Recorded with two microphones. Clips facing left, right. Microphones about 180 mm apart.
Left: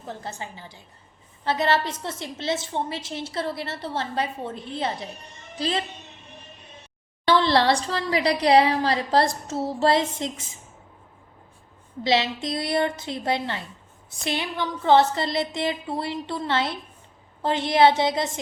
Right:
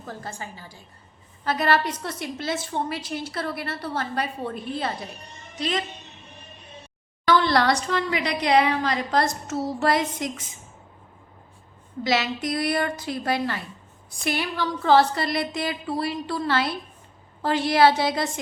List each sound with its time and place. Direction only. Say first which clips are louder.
0.0 s a woman's voice: left 1 dB; 20° left (ahead or behind)
7.3 s a woman's voice: left 1 dB; 30° left (ahead or behind)
12.0 s a woman's voice: left 1 dB; 25° left (ahead or behind)